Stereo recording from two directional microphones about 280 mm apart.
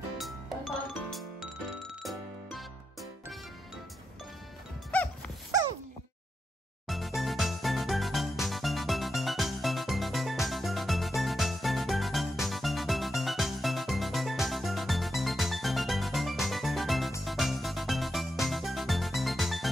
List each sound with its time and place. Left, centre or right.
0.2 s music: centre
4.9 s music: centre
7.2 s music: centre